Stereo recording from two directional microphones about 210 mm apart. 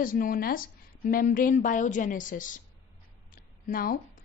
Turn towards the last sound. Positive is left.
turn(degrees=45)  # may be behind; listen again after turning